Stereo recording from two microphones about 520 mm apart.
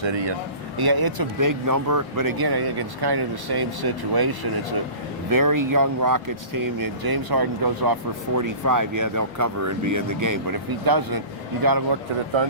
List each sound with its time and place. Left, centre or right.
0.0 s a man's voice: right
0.8 s speech: right